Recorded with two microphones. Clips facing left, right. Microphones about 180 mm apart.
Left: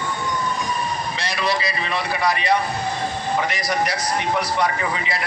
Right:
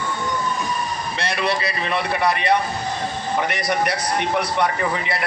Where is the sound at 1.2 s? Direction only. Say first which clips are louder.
Right 2 dB; 60° right (ahead or behind).